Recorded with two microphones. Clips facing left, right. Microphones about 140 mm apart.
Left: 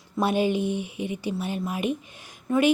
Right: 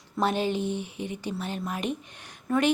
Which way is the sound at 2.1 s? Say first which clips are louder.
Left 1 dB; 10° left (ahead or behind).